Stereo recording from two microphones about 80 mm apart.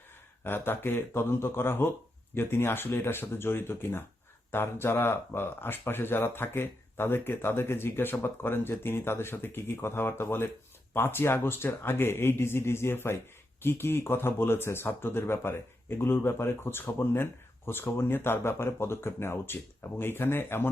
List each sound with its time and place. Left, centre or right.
0.4 s speech: left